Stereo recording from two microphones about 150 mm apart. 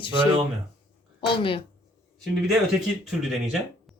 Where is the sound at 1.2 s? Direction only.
35° left (ahead or behind).